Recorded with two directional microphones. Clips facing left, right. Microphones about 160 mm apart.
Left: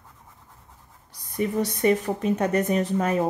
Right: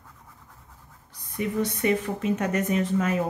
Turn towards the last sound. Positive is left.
turn(degrees=40)  # may be behind; listen again after turning